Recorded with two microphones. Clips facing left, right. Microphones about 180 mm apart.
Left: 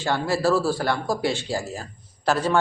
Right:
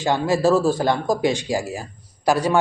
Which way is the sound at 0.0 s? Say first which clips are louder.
Right 4 dB; 15° right (ahead or behind).